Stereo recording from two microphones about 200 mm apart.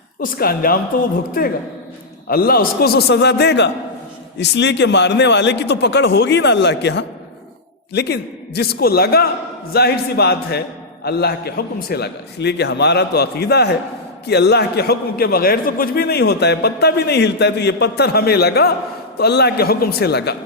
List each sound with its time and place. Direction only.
0.2 s a man's voice: 50° left (ahead or behind)
2.2 s a man's voice: 50° left (ahead or behind)